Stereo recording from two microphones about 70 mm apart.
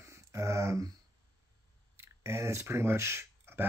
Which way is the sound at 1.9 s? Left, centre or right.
Right.